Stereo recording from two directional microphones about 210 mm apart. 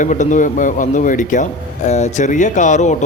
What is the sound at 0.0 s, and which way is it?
A man's voice, 35° left (ahead or behind).